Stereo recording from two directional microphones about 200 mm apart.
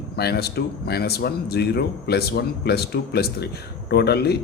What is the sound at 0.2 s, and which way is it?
Speech, 55° left (ahead or behind).